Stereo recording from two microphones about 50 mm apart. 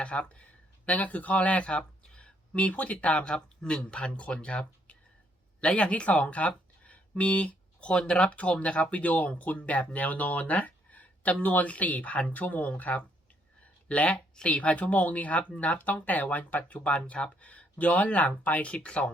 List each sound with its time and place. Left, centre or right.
0.0 s speech: left
18.7 s speech: left